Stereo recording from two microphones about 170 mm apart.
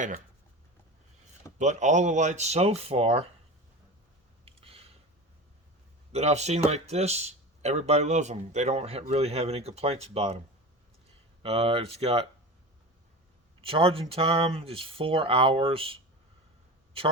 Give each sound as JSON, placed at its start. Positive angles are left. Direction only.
{"t": 1.5, "sound": "speech", "side_deg": -45}
{"t": 4.4, "sound": "a sound", "side_deg": -35}
{"t": 6.1, "sound": "speech", "side_deg": -40}
{"t": 11.4, "sound": "speech", "side_deg": -35}
{"t": 13.7, "sound": "speech", "side_deg": -35}